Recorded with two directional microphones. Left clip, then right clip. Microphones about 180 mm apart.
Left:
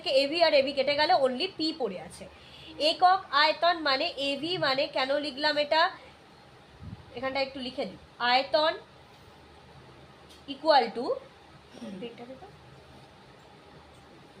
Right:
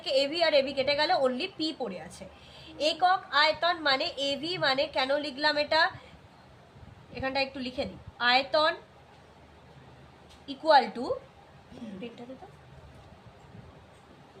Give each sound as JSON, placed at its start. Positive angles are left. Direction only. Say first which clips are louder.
{"t": 0.0, "sound": "a woman's voice", "louder": "left 2 dB", "side_deg": 15}
{"t": 7.2, "sound": "a woman's voice", "louder": "even", "side_deg": 15}
{"t": 10.6, "sound": "a woman's voice", "louder": "right 1 dB", "side_deg": 10}